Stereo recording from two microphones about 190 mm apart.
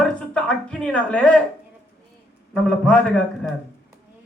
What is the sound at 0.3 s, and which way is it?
Speech, 5° left (ahead or behind).